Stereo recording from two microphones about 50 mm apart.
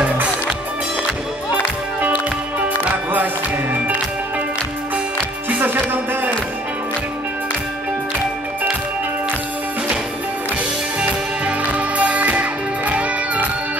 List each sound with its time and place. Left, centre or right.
11.0 s music: right